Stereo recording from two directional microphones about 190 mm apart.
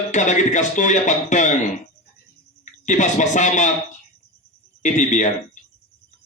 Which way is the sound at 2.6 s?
40° left (ahead or behind).